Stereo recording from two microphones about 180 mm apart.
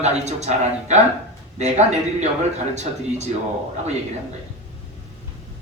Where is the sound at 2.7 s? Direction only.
40° right (ahead or behind).